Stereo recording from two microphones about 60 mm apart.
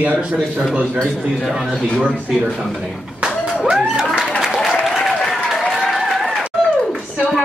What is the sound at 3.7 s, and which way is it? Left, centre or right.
Music, centre.